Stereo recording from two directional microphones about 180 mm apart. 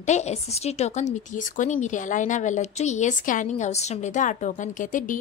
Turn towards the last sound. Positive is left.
turn(degrees=45)  # may be behind; listen again after turning